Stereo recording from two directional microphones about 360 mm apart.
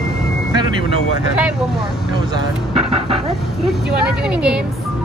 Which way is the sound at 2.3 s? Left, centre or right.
Centre.